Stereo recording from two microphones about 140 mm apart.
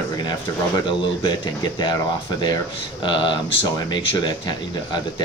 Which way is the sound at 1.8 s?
30° left (ahead or behind).